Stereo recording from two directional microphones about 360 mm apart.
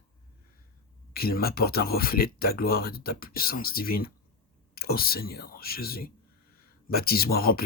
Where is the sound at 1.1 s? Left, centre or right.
Left.